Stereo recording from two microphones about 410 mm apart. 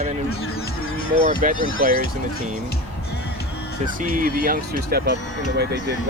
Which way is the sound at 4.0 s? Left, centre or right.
Centre.